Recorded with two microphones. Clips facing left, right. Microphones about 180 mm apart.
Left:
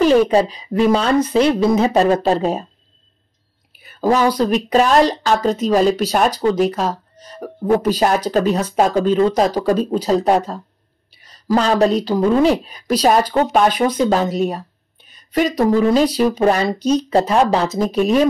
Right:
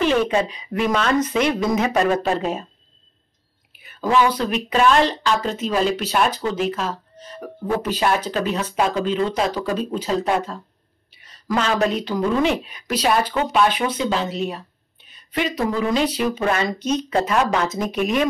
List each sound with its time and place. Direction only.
0.0 s speech: 40° left (ahead or behind)
3.8 s speech: 40° left (ahead or behind)